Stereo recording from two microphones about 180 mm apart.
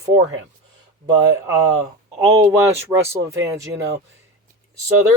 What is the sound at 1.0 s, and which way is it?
Speech, 20° right (ahead or behind).